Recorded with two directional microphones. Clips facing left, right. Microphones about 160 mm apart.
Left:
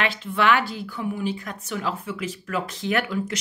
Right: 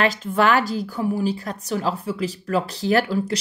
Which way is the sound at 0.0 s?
40° right (ahead or behind).